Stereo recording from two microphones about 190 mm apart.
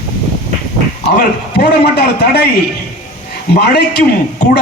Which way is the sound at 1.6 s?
60° left (ahead or behind).